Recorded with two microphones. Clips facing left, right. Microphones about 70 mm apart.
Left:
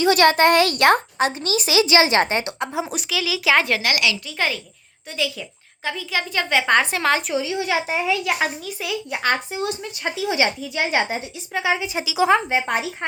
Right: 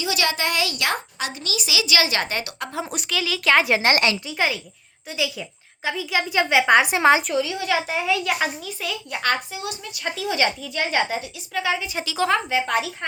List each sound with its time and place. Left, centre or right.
0.0 s a child's voice: left
2.9 s a child's voice: centre
3.7 s a woman's voice: right
4.3 s a woman's voice: centre
7.3 s a woman's voice: left
8.0 s a child's voice: centre
9.5 s a woman's voice: left
10.0 s a woman's voice: centre
12.3 s a woman's voice: left